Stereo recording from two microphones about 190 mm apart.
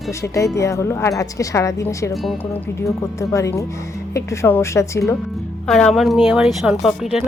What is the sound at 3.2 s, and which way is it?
Speech, 15° left (ahead or behind).